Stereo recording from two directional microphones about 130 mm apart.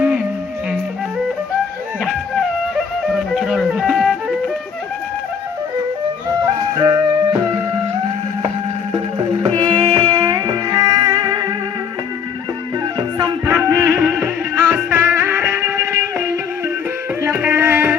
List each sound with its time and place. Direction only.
2.7 s music: centre (ahead or behind)
6.7 s music: 30° right (ahead or behind)
8.9 s music: 35° right (ahead or behind)
13.0 s music: 30° right (ahead or behind); by 17.9 s 15° right (ahead or behind)